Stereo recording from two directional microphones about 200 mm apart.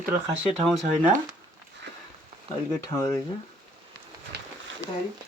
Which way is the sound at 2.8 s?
20° left (ahead or behind).